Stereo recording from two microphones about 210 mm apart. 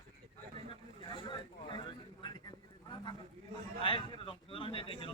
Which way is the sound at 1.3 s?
20° left (ahead or behind).